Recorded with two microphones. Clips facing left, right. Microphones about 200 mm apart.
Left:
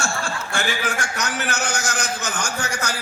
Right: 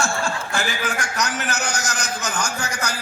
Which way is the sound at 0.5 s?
35° right (ahead or behind).